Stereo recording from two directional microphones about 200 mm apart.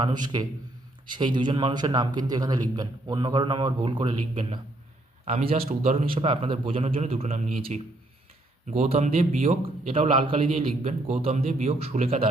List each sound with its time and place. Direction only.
0.0 s a man's voice: 20° right (ahead or behind)